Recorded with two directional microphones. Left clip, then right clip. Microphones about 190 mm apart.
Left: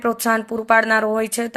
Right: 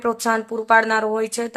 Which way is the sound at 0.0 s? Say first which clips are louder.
Left 1 dB; 10° left (ahead or behind).